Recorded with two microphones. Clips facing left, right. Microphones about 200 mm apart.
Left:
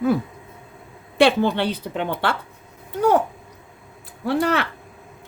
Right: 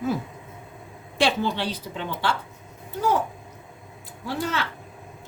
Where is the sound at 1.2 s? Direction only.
60° left (ahead or behind).